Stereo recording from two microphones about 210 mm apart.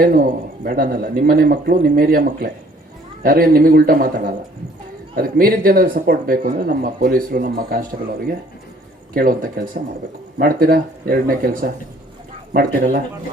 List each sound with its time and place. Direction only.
0.0 s speech: 40° right (ahead or behind)
9.1 s a man's voice: 45° right (ahead or behind)